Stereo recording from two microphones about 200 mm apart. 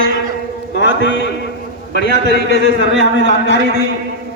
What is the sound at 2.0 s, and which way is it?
A man's voice, 55° right (ahead or behind).